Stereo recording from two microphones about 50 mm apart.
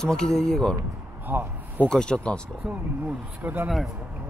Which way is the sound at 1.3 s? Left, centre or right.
Right.